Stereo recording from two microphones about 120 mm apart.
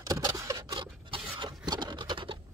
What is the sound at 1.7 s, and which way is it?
Scratch, 40° right (ahead or behind).